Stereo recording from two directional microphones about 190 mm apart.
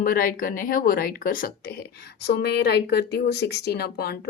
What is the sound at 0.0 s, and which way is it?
A woman's voice, 50° left (ahead or behind).